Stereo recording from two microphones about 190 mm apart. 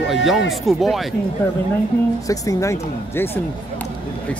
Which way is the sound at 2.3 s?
15° left (ahead or behind).